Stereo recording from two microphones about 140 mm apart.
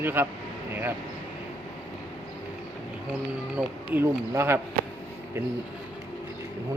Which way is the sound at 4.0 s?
20° right (ahead or behind).